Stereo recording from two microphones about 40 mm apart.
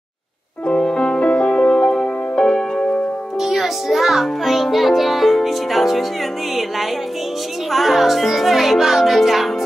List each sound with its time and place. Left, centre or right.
0.7 s music: left
3.3 s music: centre
7.7 s speech: centre